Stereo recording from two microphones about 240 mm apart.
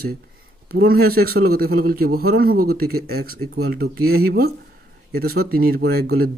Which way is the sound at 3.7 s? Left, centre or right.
Right.